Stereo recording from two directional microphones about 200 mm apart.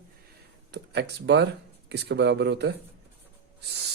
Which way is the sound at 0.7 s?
55° right (ahead or behind).